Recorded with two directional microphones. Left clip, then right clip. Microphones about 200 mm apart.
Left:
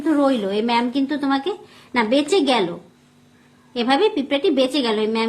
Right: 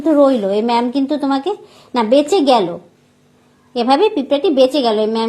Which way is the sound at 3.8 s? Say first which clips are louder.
Right 5 dB; 15° right (ahead or behind).